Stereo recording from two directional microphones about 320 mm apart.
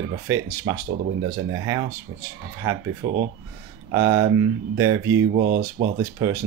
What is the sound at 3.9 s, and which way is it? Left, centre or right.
Speech, centre.